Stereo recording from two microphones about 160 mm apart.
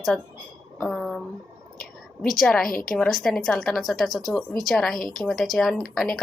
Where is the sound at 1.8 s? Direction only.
60° left (ahead or behind).